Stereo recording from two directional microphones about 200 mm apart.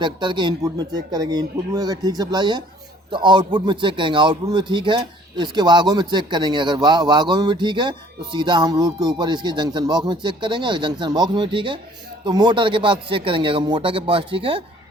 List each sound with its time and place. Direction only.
0.0 s a man's voice: 25° right (ahead or behind)